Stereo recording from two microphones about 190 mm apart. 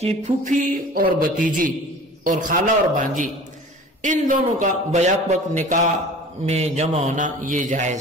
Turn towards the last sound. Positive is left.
turn(degrees=-40)  # may be behind; listen again after turning